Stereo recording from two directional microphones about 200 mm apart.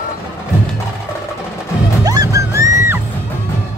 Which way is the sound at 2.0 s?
15° right (ahead or behind).